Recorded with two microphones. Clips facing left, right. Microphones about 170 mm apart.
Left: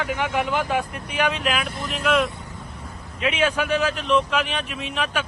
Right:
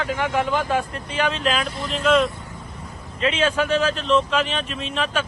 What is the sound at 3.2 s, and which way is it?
Speech, 15° left (ahead or behind).